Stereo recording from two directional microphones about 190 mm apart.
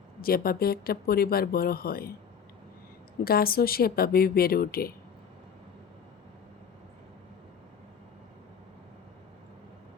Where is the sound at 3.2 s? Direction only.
50° left (ahead or behind).